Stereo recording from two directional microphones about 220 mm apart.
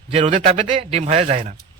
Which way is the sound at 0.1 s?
25° right (ahead or behind).